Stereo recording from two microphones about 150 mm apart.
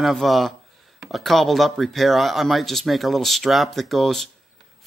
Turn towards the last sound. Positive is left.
turn(degrees=0)  # may be behind; listen again after turning